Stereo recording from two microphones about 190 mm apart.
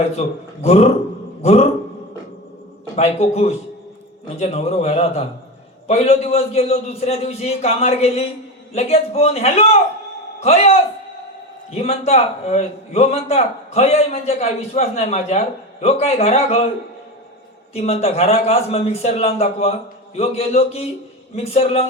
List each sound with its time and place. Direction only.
0.0 s a man's voice: 35° left (ahead or behind)
2.9 s a man's voice: 35° left (ahead or behind)
17.7 s a man's voice: 35° left (ahead or behind)